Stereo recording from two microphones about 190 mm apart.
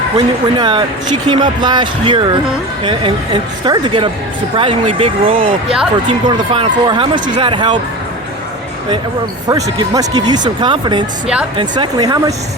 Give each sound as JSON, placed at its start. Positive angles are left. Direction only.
{"t": 0.2, "sound": "speech", "side_deg": -25}
{"t": 9.5, "sound": "speech", "side_deg": -20}